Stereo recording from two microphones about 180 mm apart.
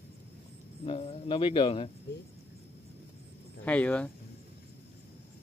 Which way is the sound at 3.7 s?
10° left (ahead or behind).